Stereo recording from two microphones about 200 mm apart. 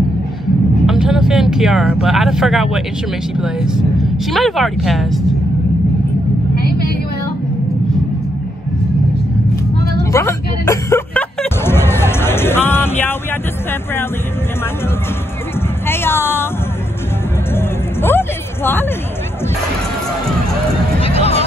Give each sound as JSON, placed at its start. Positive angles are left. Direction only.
{"t": 0.8, "sound": "speech", "side_deg": 0}
{"t": 10.1, "sound": "music", "side_deg": 15}
{"t": 15.9, "sound": "speech", "side_deg": 10}
{"t": 17.6, "sound": "hubbub", "side_deg": 10}
{"t": 21.0, "sound": "music", "side_deg": 30}